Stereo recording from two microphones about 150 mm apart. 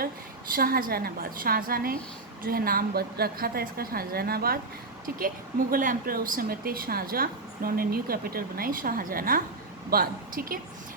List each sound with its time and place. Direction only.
0.5 s a woman's voice: 75° right (ahead or behind)
5.7 s speech: 65° right (ahead or behind)